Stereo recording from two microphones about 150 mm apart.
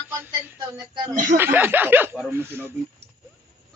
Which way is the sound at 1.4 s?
15° right (ahead or behind).